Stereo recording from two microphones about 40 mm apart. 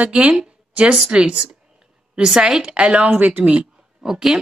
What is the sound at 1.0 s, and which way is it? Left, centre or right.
Speech, right.